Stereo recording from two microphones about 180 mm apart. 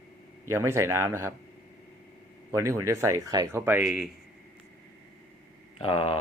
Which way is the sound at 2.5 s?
15° right (ahead or behind).